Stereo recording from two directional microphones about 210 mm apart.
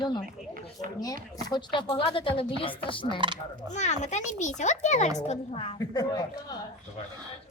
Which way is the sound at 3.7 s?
35° left (ahead or behind).